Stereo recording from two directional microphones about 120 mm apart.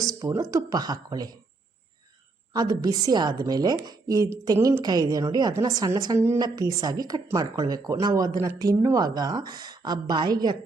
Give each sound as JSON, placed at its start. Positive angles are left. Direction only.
{"t": 0.1, "sound": "a sound", "side_deg": -30}
{"t": 0.5, "sound": "speech", "side_deg": -30}
{"t": 2.5, "sound": "a woman's voice", "side_deg": -35}